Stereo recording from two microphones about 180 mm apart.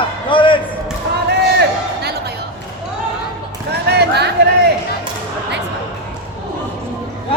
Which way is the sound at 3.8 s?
65° right (ahead or behind).